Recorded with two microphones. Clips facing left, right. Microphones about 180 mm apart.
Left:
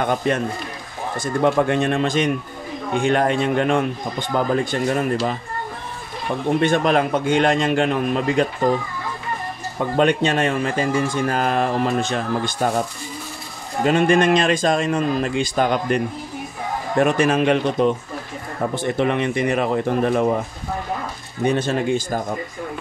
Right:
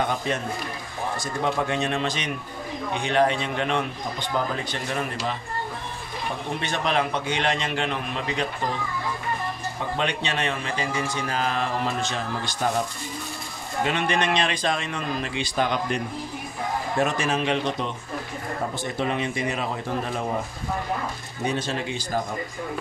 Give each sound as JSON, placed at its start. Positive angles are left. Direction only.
{"t": 0.3, "sound": "a man's voice", "side_deg": 55}
{"t": 6.6, "sound": "a man's voice", "side_deg": 50}
{"t": 9.9, "sound": "a man's voice", "side_deg": 45}
{"t": 13.8, "sound": "a man's voice", "side_deg": 45}
{"t": 17.0, "sound": "a man's voice", "side_deg": 55}
{"t": 18.8, "sound": "a man's voice", "side_deg": 60}
{"t": 21.5, "sound": "a man's voice", "side_deg": 50}